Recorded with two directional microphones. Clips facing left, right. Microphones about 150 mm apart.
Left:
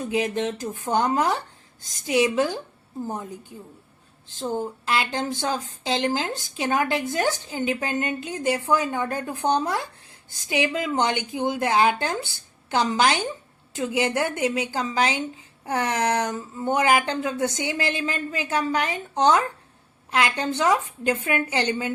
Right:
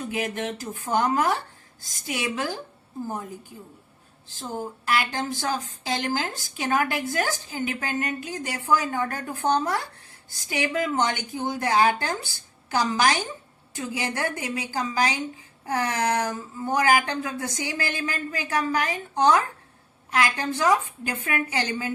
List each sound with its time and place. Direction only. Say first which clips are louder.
0.1 s speech: left 6 dB; 25° left (ahead or behind)
4.4 s speech: left 5 dB; 25° left (ahead or behind)